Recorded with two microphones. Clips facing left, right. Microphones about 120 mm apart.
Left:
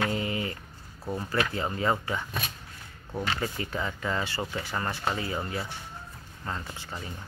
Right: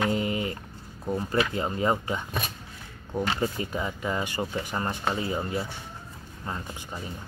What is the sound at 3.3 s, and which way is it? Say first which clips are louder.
Speech: right 3 dB; 20° right (ahead or behind).